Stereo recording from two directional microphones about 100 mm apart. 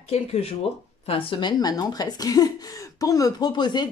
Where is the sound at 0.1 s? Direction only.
90° left.